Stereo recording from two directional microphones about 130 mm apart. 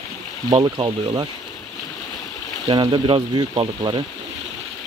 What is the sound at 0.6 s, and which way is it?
Speech, 35° right (ahead or behind).